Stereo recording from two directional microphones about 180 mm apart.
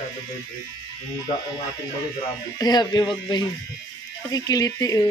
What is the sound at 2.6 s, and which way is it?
Speech, 25° left (ahead or behind).